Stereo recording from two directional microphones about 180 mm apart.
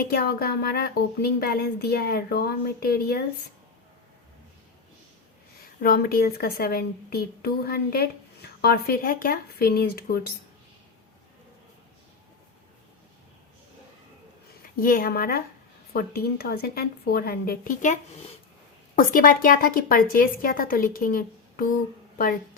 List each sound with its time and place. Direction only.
0.0 s a woman's voice: 55° left (ahead or behind)
5.8 s a woman's voice: 55° left (ahead or behind)
14.8 s a woman's voice: 50° left (ahead or behind)